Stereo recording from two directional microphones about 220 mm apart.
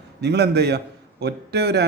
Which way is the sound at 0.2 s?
50° right (ahead or behind).